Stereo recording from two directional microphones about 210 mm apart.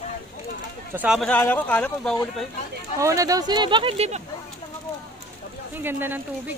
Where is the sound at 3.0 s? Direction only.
15° right (ahead or behind).